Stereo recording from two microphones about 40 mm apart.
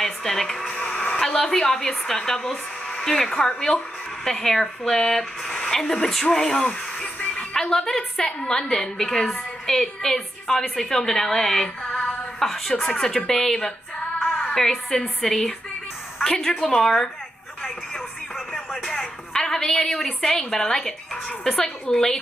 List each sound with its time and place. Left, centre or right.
0.0 s speech: centre
0.7 s a sound: left
1.2 s a woman's voice: centre
7.7 s a woman's voice: centre
11.8 s music: left
12.4 s a woman's voice: centre
18.9 s a sound: centre
20.2 s a woman's voice: centre